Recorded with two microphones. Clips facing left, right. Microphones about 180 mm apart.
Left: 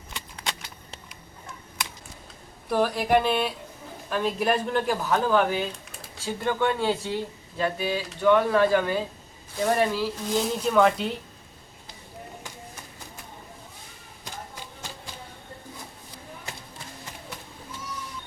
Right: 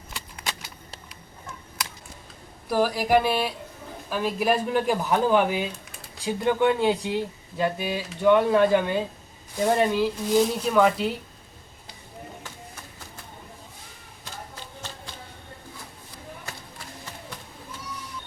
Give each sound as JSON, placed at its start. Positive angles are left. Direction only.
{"t": 0.1, "sound": "shuffling cards", "side_deg": -5}
{"t": 2.6, "sound": "speech", "side_deg": -5}
{"t": 10.3, "sound": "speech", "side_deg": -5}
{"t": 14.5, "sound": "a sound", "side_deg": 10}